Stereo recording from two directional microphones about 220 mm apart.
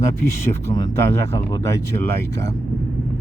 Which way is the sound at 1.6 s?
10° left (ahead or behind).